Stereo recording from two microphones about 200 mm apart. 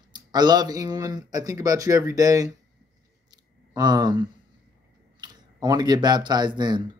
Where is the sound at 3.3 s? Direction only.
20° right (ahead or behind).